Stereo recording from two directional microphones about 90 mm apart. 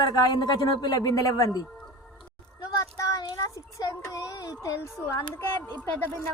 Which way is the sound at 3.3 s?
45° left (ahead or behind).